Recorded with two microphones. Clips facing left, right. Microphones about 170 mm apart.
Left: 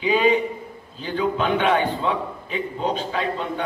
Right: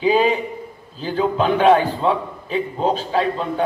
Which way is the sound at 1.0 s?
35° right (ahead or behind).